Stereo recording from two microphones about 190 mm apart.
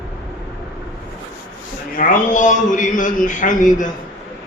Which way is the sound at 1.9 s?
45° left (ahead or behind).